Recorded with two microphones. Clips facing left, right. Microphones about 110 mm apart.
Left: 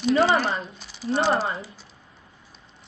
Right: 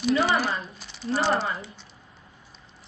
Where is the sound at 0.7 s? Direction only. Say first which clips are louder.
Left 3 dB; centre (ahead or behind).